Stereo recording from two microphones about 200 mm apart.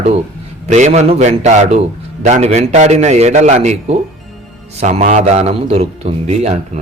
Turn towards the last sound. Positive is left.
turn(degrees=-35)  # may be behind; listen again after turning